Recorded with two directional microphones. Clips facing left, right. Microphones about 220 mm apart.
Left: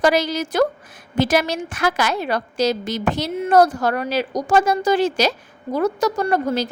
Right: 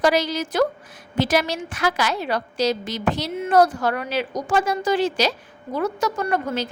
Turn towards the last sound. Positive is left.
turn(degrees=35)  # may be behind; listen again after turning